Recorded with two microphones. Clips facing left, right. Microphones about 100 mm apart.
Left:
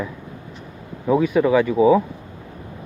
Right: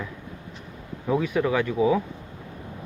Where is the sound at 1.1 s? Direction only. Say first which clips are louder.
Left 7 dB; 5° left (ahead or behind).